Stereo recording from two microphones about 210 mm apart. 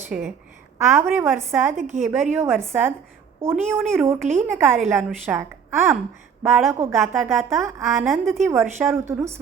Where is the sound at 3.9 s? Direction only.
10° right (ahead or behind).